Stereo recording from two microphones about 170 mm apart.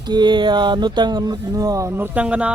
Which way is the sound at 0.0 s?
25° right (ahead or behind).